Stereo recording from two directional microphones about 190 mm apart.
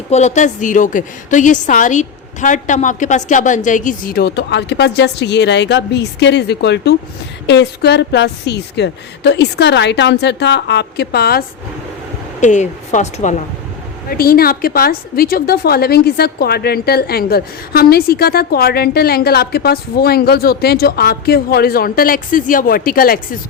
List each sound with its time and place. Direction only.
0.1 s a woman's voice: 35° left (ahead or behind); by 11.4 s 55° left (ahead or behind)
12.4 s a woman's voice: 40° left (ahead or behind)
14.1 s a woman's voice: 50° left (ahead or behind)